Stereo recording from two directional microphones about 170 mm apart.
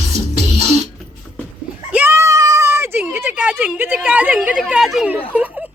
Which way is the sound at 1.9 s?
15° right (ahead or behind).